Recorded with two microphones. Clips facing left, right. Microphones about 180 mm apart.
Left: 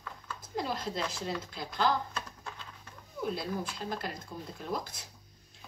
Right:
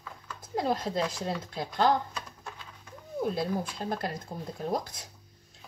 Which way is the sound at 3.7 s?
50° right (ahead or behind).